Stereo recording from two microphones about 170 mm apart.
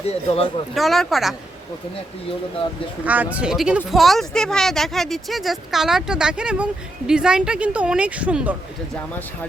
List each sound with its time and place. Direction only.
0.0 s speech: 40° left (ahead or behind)
0.7 s speech: centre (ahead or behind)
3.0 s a woman's voice: 10° right (ahead or behind)